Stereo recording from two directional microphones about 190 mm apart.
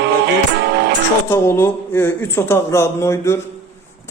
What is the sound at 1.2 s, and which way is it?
A man's voice, 15° left (ahead or behind).